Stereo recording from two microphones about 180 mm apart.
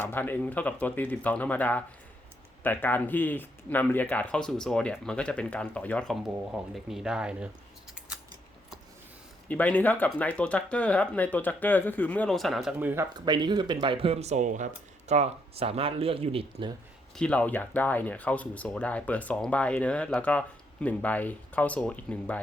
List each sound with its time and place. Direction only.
0.0 s speech: 10° left (ahead or behind); by 7.5 s 5° right (ahead or behind)
9.5 s speech: 10° left (ahead or behind); by 13.1 s 10° right (ahead or behind)
13.1 s speech: 25° right (ahead or behind)
17.2 s speech: 5° left (ahead or behind)